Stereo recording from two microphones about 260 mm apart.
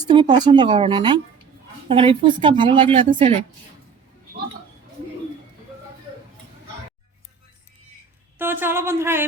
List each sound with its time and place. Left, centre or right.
0.0 s a woman's voice: centre
8.4 s speech: centre